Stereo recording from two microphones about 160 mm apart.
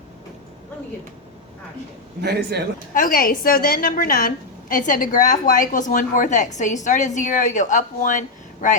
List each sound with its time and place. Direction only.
2.2 s speech: 90° right
2.9 s a woman's voice: 60° left (ahead or behind)